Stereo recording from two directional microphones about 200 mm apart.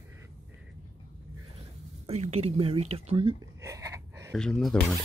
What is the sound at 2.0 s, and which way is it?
Speech, 30° right (ahead or behind).